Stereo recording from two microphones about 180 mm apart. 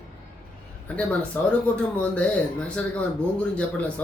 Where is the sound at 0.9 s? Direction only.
10° left (ahead or behind).